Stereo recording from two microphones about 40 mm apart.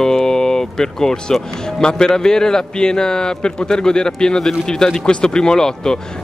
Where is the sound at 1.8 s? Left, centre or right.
Centre.